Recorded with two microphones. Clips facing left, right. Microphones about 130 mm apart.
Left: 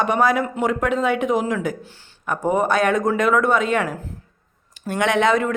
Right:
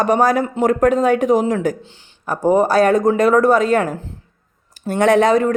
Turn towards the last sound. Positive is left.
turn(degrees=-40)  # may be behind; listen again after turning